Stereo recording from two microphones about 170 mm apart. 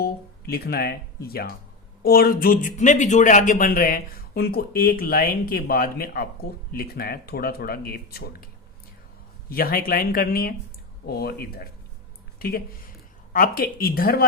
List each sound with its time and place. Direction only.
0.0 s speech: 65° left (ahead or behind)
9.5 s speech: 60° left (ahead or behind)